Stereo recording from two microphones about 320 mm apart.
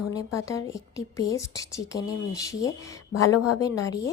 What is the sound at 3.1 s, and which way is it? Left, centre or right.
Speech, left.